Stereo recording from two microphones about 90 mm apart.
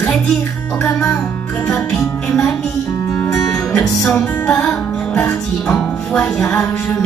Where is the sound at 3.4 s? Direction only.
5° left (ahead or behind).